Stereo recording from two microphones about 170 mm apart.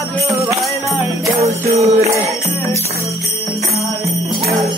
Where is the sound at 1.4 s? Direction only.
35° right (ahead or behind).